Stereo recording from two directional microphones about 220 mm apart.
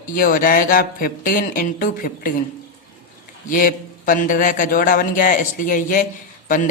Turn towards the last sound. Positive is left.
turn(degrees=35)  # may be behind; listen again after turning